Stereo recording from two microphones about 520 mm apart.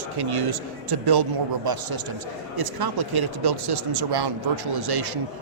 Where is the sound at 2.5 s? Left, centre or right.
Right.